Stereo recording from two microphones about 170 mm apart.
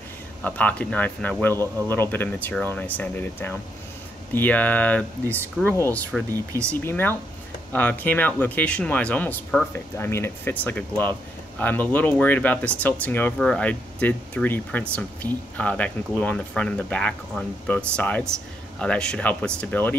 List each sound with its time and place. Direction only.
0.4 s speech: 10° left (ahead or behind)
6.3 s speech: 20° right (ahead or behind)
6.7 s speech: 10° left (ahead or behind)